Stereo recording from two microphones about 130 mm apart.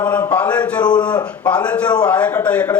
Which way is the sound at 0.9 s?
35° left (ahead or behind).